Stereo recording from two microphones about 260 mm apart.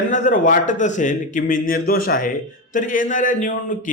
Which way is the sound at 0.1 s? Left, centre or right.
Left.